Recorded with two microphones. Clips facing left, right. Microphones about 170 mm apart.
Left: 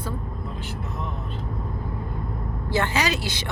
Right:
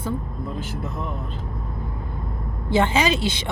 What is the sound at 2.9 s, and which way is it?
Speech, 25° right (ahead or behind).